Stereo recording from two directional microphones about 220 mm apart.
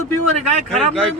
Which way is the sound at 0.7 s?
Centre (ahead or behind).